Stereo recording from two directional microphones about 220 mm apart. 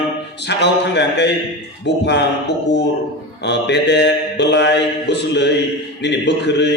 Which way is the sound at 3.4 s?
50° left (ahead or behind).